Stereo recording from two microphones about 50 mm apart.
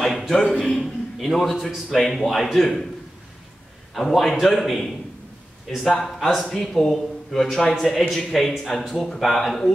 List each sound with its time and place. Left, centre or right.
0.5 s a man's voice: centre
3.9 s speech: centre